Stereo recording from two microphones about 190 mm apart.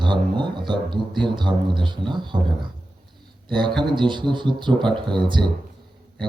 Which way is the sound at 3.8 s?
25° right (ahead or behind).